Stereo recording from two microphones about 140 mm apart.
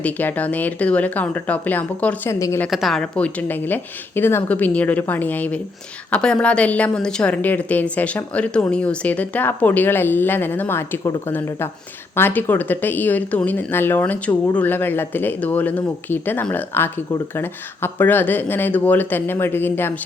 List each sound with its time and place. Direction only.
0.0 s a woman's voice: 10° left (ahead or behind)
2.6 s a woman's voice: centre (ahead or behind); by 19.9 s 15° left (ahead or behind)